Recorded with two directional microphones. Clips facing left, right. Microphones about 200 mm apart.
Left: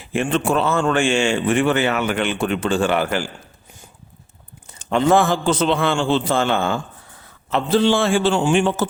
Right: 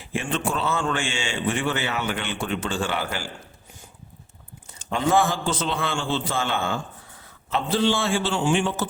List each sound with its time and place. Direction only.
0.2 s a man's voice: 70° left (ahead or behind); by 0.9 s 50° left (ahead or behind)
0.9 s speech: 65° left (ahead or behind)
4.9 s a man's voice: 65° left (ahead or behind); by 6.2 s 85° left
6.3 s a man's voice: 75° left (ahead or behind)
7.5 s a man's voice: 55° left (ahead or behind)